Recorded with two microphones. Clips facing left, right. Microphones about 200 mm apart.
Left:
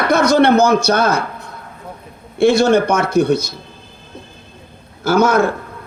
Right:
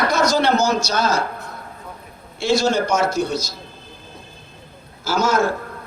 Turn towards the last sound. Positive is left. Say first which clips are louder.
# left 6 dB
turn(degrees=55)  # may be behind; listen again after turning